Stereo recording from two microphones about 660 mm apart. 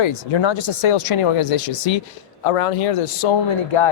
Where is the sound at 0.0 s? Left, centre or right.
Left.